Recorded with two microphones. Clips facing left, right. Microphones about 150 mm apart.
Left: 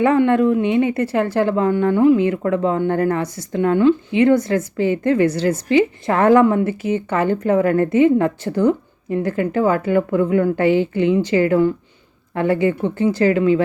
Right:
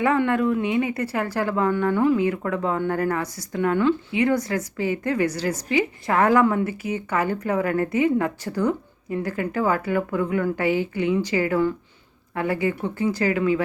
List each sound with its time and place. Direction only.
0.0 s a woman's voice: 25° left (ahead or behind)